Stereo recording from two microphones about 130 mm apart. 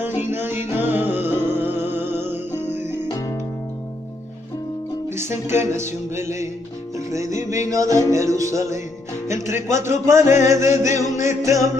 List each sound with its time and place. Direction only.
0.0 s music: 15° right (ahead or behind)
3.1 s music: 25° left (ahead or behind)
5.5 s music: 20° right (ahead or behind)